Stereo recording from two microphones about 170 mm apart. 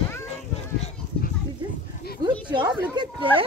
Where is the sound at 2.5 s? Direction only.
25° right (ahead or behind).